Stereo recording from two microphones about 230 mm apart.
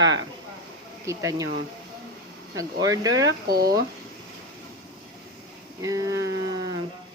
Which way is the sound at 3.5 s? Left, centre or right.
Right.